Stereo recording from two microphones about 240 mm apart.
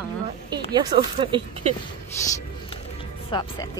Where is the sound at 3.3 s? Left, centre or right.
Centre.